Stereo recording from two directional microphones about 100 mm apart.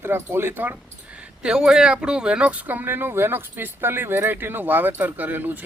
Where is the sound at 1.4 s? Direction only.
5° right (ahead or behind).